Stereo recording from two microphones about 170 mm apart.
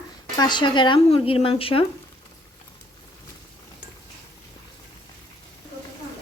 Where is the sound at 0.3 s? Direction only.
25° left (ahead or behind).